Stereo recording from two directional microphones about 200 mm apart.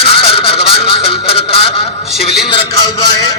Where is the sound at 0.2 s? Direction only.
30° left (ahead or behind).